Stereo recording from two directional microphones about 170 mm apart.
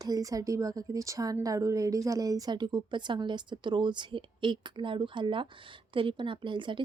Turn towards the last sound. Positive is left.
turn(degrees=-30)  # may be behind; listen again after turning